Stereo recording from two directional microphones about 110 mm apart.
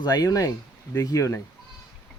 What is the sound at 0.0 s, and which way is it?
Speech, 35° left (ahead or behind).